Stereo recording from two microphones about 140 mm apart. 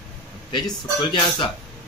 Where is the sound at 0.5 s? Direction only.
35° left (ahead or behind).